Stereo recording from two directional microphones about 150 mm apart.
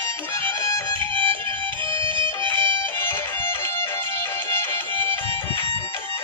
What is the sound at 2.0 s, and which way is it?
Music, 35° right (ahead or behind).